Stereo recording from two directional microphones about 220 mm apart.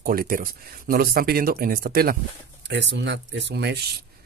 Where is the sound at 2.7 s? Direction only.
55° right (ahead or behind).